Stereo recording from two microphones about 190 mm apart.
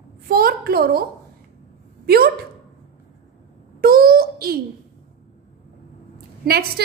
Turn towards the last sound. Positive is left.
turn(degrees=-55)  # may be behind; listen again after turning